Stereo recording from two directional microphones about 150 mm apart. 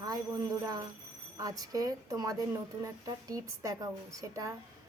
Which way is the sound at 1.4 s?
25° right (ahead or behind).